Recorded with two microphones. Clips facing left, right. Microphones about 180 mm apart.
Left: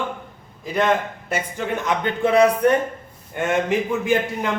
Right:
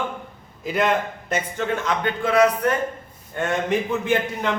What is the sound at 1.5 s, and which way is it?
A man's voice, 15° left (ahead or behind).